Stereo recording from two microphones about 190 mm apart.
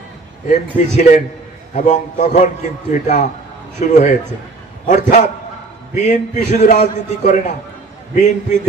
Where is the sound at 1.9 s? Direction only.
40° left (ahead or behind).